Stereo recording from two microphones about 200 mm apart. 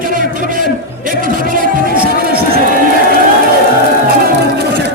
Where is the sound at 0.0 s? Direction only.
45° right (ahead or behind).